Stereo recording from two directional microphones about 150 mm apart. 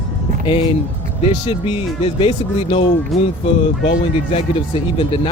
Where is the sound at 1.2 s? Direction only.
40° left (ahead or behind).